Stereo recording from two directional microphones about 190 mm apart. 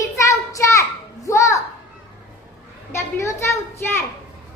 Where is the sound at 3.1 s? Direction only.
15° left (ahead or behind).